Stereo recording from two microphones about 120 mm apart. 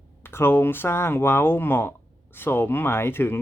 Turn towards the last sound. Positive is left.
turn(degrees=20)  # may be behind; listen again after turning